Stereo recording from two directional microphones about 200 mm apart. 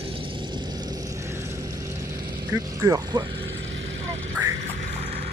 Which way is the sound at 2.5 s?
15° right (ahead or behind).